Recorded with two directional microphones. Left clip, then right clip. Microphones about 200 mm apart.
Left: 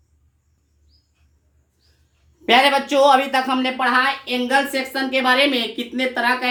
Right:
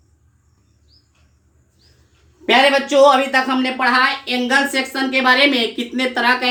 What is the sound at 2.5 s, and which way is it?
Speech, 40° left (ahead or behind).